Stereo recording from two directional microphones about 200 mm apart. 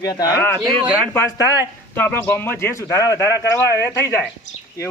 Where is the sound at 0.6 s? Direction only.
25° right (ahead or behind).